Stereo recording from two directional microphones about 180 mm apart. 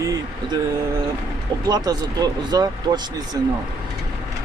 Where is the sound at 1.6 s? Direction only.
20° right (ahead or behind).